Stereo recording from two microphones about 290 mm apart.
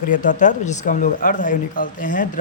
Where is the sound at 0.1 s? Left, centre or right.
Left.